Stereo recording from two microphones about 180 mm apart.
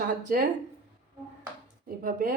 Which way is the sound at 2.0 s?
50° right (ahead or behind).